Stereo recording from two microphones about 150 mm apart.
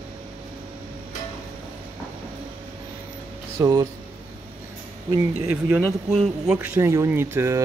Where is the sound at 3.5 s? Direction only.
25° right (ahead or behind).